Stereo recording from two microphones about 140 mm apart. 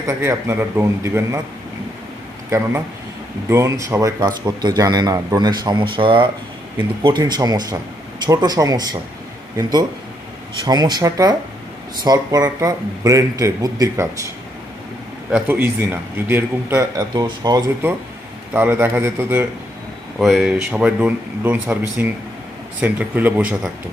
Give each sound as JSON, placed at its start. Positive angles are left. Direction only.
{"t": 0.1, "sound": "speech", "side_deg": -20}
{"t": 2.5, "sound": "a man's voice", "side_deg": -15}
{"t": 10.7, "sound": "speech", "side_deg": -30}
{"t": 15.4, "sound": "a man's voice", "side_deg": -15}
{"t": 17.0, "sound": "speech", "side_deg": -30}
{"t": 18.5, "sound": "a man's voice", "side_deg": -15}
{"t": 20.1, "sound": "a man's voice", "side_deg": -5}